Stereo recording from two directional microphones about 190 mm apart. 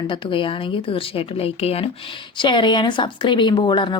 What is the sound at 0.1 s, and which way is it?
Speech, 25° left (ahead or behind).